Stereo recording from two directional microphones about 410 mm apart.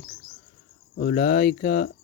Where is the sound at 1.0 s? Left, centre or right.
Centre.